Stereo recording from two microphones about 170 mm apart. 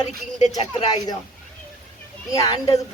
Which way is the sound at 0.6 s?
25° left (ahead or behind).